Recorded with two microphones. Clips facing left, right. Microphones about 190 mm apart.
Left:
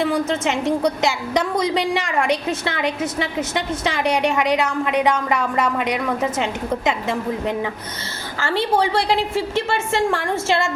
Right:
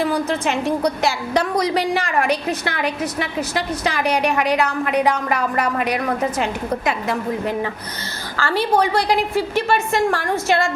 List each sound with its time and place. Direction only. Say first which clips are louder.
0.0 s a woman's voice: even; 25° left (ahead or behind)